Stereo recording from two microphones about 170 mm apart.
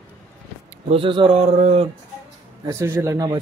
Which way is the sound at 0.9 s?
30° right (ahead or behind).